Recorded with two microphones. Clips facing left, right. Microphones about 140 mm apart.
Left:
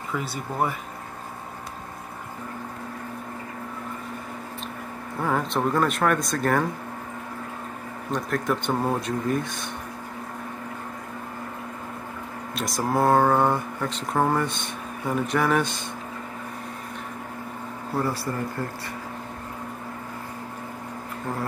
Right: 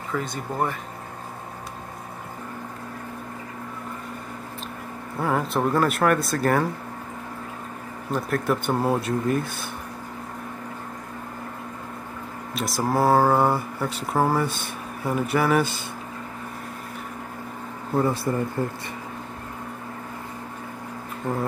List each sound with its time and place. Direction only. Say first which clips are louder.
0.1 s speech: right 2 dB; 5° left (ahead or behind)
5.2 s speech: right 1 dB; 5° right (ahead or behind)
8.1 s speech: right 2 dB; 5° right (ahead or behind)
12.5 s speech: right 1 dB; centre (ahead or behind)
17.9 s speech: right 4 dB; 20° right (ahead or behind)